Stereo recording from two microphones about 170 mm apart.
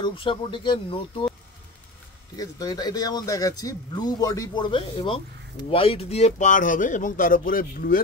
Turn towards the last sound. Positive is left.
turn(degrees=55)  # may be behind; listen again after turning